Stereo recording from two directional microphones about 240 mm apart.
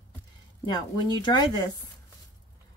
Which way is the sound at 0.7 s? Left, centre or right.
Centre.